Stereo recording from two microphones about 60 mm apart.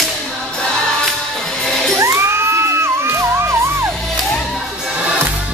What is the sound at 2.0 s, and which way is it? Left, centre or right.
Music, right.